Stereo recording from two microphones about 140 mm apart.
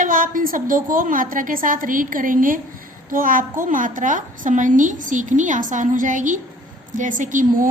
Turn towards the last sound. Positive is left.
turn(degrees=-70)  # may be behind; listen again after turning